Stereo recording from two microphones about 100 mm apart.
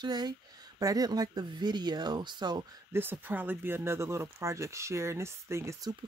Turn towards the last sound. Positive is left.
turn(degrees=-25)  # may be behind; listen again after turning